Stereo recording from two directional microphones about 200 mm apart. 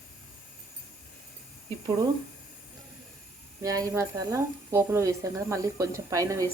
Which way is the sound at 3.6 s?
15° right (ahead or behind).